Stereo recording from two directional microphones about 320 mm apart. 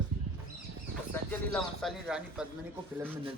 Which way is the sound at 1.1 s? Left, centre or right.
Centre.